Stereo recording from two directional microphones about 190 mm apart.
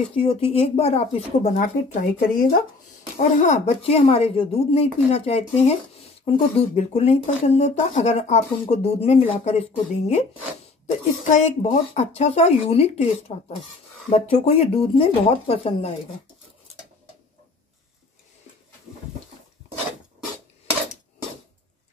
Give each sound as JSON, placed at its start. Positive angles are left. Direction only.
{"t": 0.1, "sound": "speech", "side_deg": 30}
{"t": 11.2, "sound": "speech", "side_deg": 40}
{"t": 14.1, "sound": "speech", "side_deg": 30}